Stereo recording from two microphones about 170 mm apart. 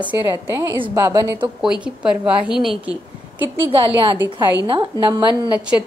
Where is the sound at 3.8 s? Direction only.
30° right (ahead or behind).